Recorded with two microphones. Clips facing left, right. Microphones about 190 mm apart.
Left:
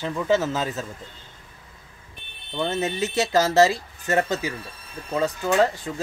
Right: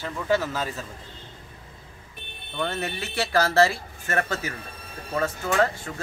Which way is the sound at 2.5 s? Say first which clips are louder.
Left 4 dB; 20° left (ahead or behind).